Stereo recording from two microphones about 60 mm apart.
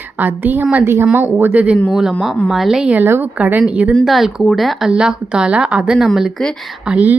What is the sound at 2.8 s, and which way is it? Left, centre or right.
A woman's voice, right.